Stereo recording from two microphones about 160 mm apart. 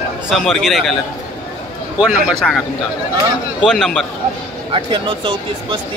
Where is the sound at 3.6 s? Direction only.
Centre (ahead or behind).